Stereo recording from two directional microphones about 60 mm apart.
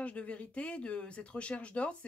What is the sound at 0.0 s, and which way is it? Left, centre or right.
Speech, left.